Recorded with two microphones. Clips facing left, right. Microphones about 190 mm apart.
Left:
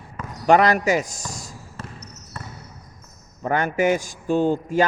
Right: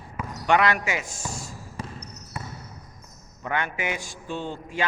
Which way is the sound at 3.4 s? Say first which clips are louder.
Left 8 dB; 40° left (ahead or behind).